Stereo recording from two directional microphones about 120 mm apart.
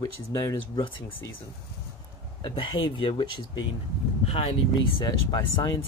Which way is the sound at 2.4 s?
40° left (ahead or behind).